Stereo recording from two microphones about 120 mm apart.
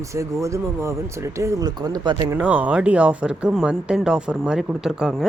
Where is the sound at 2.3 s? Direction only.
10° right (ahead or behind).